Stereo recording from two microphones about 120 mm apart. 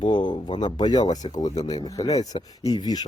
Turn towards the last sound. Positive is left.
turn(degrees=35)  # may be behind; listen again after turning